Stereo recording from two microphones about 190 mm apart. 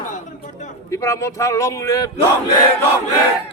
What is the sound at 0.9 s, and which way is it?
Speech, 15° left (ahead or behind).